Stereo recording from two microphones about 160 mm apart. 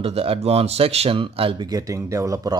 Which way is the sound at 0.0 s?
35° right (ahead or behind).